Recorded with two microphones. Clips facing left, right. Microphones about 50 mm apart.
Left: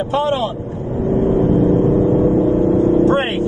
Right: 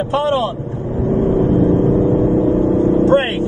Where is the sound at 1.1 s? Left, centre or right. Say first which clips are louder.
Even; left.